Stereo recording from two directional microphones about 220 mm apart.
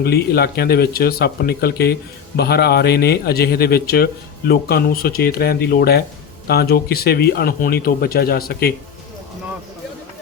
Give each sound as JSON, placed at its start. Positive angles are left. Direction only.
{"t": 0.0, "sound": "speech", "side_deg": 45}